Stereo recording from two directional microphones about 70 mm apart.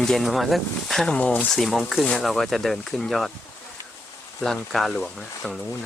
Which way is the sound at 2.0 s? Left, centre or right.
Centre.